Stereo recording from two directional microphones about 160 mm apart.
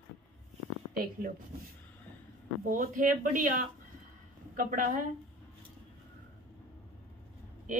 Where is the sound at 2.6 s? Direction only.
55° right (ahead or behind).